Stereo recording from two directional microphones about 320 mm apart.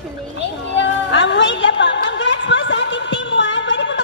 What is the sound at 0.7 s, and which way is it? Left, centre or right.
Music, left.